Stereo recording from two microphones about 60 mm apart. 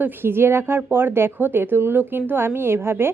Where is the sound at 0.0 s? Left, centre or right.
Right.